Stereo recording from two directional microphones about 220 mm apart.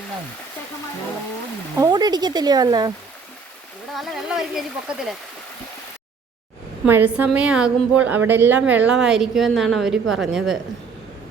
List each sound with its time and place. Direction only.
1.7 s speech: 15° right (ahead or behind)
3.9 s a woman's voice: centre (ahead or behind)
6.8 s a woman's voice: 10° right (ahead or behind)